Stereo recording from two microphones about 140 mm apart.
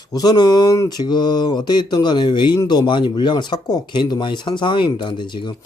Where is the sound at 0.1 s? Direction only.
30° left (ahead or behind).